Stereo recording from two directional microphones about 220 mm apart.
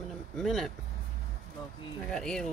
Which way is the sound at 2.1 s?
Centre (ahead or behind).